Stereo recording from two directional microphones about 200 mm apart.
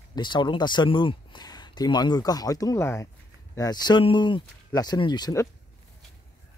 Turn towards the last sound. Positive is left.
turn(degrees=15)  # may be behind; listen again after turning